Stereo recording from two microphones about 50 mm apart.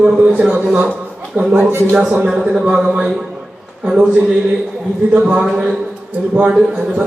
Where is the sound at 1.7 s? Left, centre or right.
Right.